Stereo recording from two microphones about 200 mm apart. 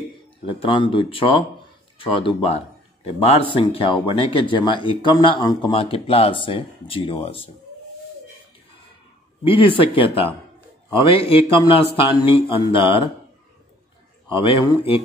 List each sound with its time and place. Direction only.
0.5 s speech: 25° left (ahead or behind)
9.4 s speech: 25° left (ahead or behind)
14.3 s speech: 25° left (ahead or behind)